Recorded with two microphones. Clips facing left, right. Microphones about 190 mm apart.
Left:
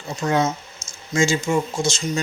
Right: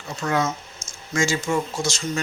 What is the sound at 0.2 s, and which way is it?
Speech, 25° left (ahead or behind).